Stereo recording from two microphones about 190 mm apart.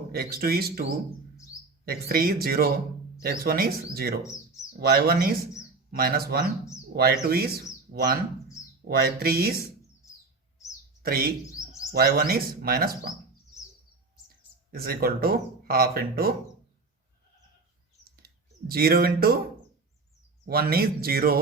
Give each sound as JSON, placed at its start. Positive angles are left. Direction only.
{"t": 0.1, "sound": "speech", "side_deg": -55}
{"t": 8.8, "sound": "speech", "side_deg": -55}
{"t": 11.0, "sound": "speech", "side_deg": -50}
{"t": 11.4, "sound": "bird", "side_deg": 15}
{"t": 11.9, "sound": "speech", "side_deg": -55}
{"t": 14.7, "sound": "speech", "side_deg": -50}
{"t": 18.7, "sound": "speech", "side_deg": -50}
{"t": 20.4, "sound": "speech", "side_deg": -55}